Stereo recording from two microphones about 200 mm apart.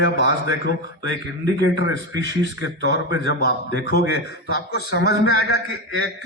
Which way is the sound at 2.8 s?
55° left (ahead or behind).